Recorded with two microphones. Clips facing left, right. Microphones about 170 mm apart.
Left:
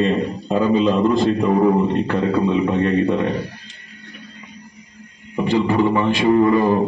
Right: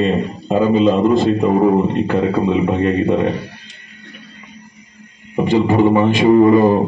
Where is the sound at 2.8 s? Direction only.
5° right (ahead or behind).